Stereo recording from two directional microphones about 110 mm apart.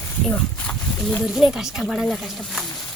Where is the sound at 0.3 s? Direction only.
15° left (ahead or behind).